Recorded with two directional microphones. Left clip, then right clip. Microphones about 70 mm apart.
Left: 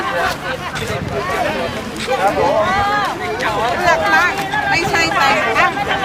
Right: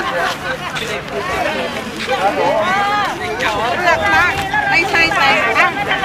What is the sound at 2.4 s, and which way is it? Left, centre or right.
Chatter, centre.